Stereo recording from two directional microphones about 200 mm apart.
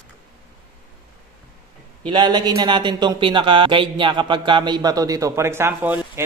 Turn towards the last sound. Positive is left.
turn(degrees=-10)  # may be behind; listen again after turning